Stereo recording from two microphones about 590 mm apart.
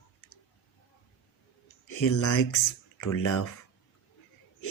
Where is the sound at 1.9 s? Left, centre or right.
Left.